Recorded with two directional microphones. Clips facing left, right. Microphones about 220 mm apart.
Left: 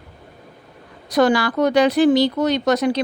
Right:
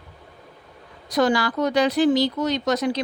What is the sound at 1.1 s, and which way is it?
Speech, 65° left (ahead or behind).